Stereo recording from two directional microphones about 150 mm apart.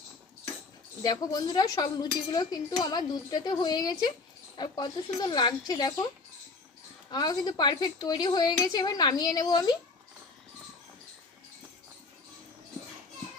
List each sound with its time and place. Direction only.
1.0 s speech: 25° left (ahead or behind)
7.1 s speech: 30° left (ahead or behind)